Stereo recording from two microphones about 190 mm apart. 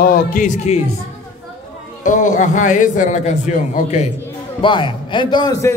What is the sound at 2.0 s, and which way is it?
A man's voice, 40° left (ahead or behind).